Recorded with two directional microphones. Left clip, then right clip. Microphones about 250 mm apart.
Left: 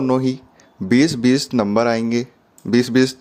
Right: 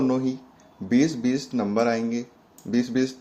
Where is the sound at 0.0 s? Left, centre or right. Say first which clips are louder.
Left 6 dB; left.